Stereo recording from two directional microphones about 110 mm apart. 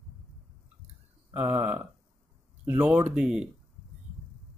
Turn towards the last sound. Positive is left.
turn(degrees=-5)  # may be behind; listen again after turning